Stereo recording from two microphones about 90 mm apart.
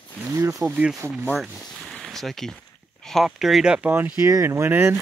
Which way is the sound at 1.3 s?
5° left (ahead or behind).